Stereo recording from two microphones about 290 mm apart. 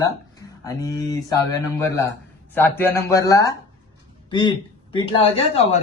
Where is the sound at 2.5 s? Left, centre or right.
Centre.